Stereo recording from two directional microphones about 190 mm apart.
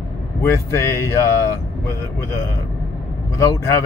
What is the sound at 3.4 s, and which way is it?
Speech, 15° left (ahead or behind).